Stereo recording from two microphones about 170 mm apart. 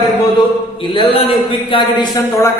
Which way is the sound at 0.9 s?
30° left (ahead or behind).